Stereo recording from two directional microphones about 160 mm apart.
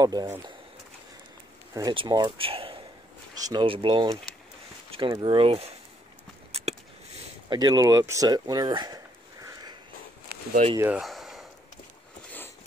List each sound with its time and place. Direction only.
0.0 s speech: 25° right (ahead or behind)
1.8 s speech: 25° right (ahead or behind)
7.4 s speech: 25° right (ahead or behind)
10.6 s speech: 45° right (ahead or behind)
11.0 s a sound: centre (ahead or behind)